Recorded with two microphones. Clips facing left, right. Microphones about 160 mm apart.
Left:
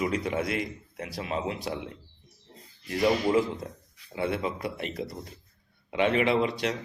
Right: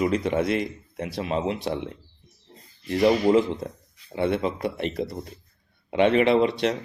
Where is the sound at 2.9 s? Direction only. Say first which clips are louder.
Right 5 dB; 25° right (ahead or behind).